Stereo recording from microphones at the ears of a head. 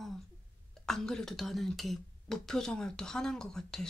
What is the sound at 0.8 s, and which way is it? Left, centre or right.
Speech, centre.